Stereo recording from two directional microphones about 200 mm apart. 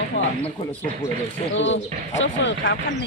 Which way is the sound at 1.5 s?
70° left (ahead or behind).